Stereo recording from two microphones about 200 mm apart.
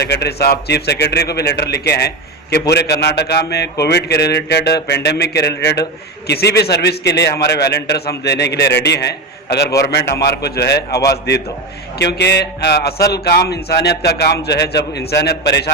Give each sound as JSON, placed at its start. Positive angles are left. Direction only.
{"t": 0.0, "sound": "a man's voice", "side_deg": 55}